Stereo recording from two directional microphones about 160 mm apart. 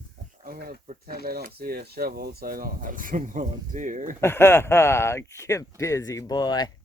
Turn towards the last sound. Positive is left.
turn(degrees=25)  # may be behind; listen again after turning